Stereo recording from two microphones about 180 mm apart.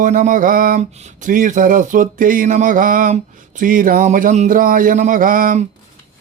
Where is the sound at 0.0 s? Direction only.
45° right (ahead or behind).